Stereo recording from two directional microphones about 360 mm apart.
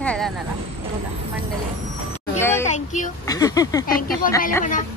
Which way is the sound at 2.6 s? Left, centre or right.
Centre.